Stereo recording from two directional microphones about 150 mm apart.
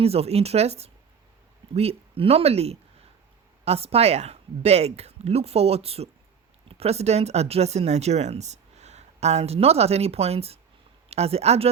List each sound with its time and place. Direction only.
0.0 s speech: 40° right (ahead or behind)